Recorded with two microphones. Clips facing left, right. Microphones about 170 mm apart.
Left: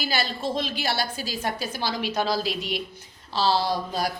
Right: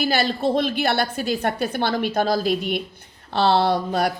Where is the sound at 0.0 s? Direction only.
60° right (ahead or behind).